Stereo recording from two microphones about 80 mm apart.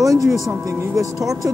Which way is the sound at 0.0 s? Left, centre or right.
Right.